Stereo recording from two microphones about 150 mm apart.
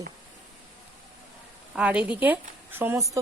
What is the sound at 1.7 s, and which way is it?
A woman's voice, 10° right (ahead or behind).